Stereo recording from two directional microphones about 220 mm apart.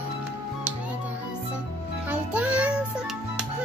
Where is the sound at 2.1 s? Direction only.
5° right (ahead or behind).